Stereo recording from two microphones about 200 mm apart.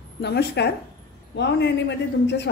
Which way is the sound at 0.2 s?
55° left (ahead or behind).